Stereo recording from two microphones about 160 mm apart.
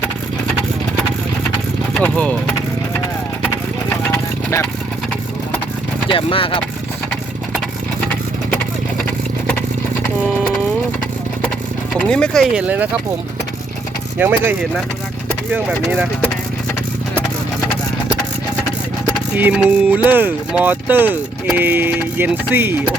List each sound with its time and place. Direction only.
1.9 s speech: 5° left (ahead or behind)
6.1 s speech: 35° left (ahead or behind)
11.9 s speech: 5° left (ahead or behind)
12.6 s speech: 10° right (ahead or behind)
14.2 s speech: 10° right (ahead or behind)
19.4 s speech: 10° right (ahead or behind)